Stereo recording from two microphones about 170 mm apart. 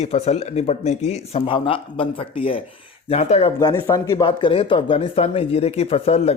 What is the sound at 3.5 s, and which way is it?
Speech, 15° left (ahead or behind).